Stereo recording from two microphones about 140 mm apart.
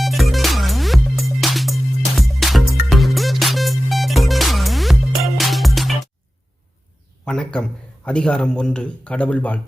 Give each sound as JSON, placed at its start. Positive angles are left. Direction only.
{"t": 0.0, "sound": "music", "side_deg": 0}
{"t": 7.3, "sound": "a man's voice", "side_deg": 5}